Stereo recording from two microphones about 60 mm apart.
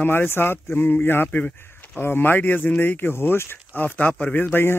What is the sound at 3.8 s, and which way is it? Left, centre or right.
Speech, left.